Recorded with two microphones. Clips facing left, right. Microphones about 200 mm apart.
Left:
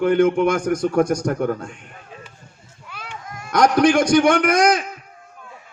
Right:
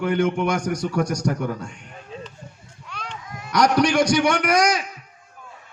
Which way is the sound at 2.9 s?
5° left (ahead or behind).